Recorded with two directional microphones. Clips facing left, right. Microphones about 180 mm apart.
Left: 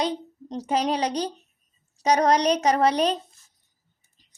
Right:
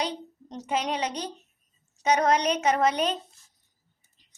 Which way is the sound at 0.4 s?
35° left (ahead or behind).